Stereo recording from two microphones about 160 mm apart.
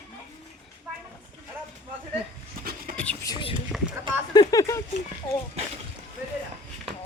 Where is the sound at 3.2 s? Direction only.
30° left (ahead or behind).